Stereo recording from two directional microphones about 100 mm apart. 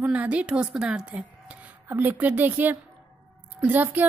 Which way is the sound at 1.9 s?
20° right (ahead or behind).